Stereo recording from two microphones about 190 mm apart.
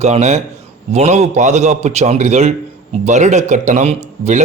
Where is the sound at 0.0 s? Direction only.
35° right (ahead or behind).